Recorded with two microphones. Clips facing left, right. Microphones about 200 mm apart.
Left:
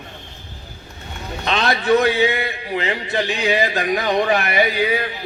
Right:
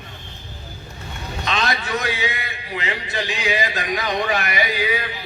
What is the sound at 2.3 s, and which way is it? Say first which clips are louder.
Music: left 7 dB; 55° left (ahead or behind).